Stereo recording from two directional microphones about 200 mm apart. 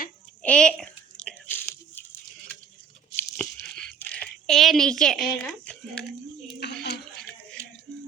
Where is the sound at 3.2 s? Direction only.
5° left (ahead or behind).